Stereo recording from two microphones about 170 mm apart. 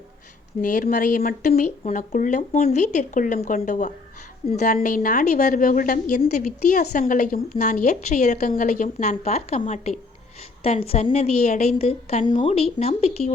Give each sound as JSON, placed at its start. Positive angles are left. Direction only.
{"t": 0.6, "sound": "a woman's voice", "side_deg": 50}